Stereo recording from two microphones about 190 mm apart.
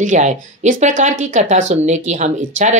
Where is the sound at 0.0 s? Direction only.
40° right (ahead or behind).